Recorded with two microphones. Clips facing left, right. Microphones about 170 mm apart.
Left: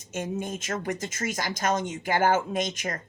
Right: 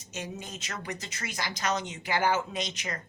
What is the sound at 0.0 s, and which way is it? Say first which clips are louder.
Speech: left 8 dB; 50° left (ahead or behind).